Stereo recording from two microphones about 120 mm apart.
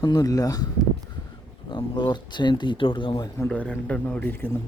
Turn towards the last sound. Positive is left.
turn(degrees=20)  # may be behind; listen again after turning